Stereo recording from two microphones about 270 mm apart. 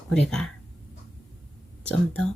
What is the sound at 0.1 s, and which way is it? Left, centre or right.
Speech, centre.